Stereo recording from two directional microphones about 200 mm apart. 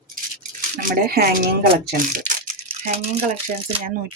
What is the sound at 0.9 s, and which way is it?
Speech, 50° right (ahead or behind).